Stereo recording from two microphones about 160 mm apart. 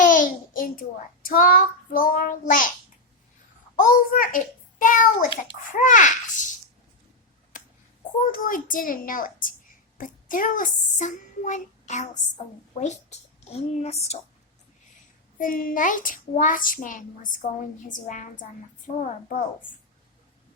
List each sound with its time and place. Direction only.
0.0 s a child's voice: 55° left (ahead or behind)
3.8 s a child's voice: 60° left (ahead or behind)
8.2 s a child's voice: 60° left (ahead or behind); by 14.2 s 40° left (ahead or behind)
15.4 s a child's voice: 60° left (ahead or behind)